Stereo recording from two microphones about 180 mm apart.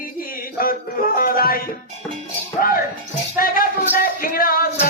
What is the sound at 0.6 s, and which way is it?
Music, 55° left (ahead or behind).